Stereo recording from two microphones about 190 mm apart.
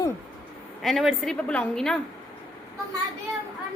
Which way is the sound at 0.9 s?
Centre (ahead or behind).